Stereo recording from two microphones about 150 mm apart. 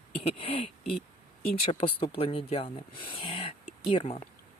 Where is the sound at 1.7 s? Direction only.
40° left (ahead or behind).